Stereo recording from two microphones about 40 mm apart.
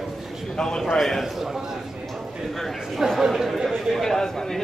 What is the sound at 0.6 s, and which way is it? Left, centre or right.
Speech, centre.